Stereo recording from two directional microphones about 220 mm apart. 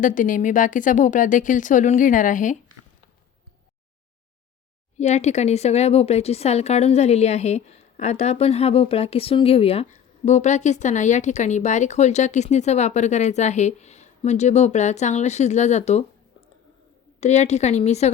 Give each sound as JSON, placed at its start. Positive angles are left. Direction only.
{"t": 0.0, "sound": "speech", "side_deg": 35}
{"t": 4.9, "sound": "speech", "side_deg": 30}
{"t": 17.2, "sound": "speech", "side_deg": 30}